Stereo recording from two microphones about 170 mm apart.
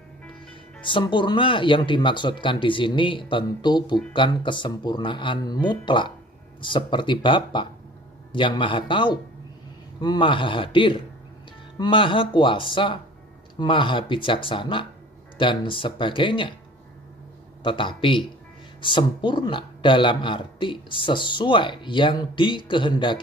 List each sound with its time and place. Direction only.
0.8 s speech: 30° left (ahead or behind)
17.6 s speech: 30° left (ahead or behind)